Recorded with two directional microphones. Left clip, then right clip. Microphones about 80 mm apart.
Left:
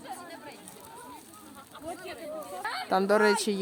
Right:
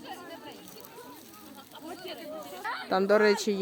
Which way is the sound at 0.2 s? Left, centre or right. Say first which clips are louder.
Even; left.